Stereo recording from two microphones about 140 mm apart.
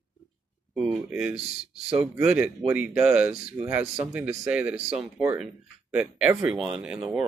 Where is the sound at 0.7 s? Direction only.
5° right (ahead or behind).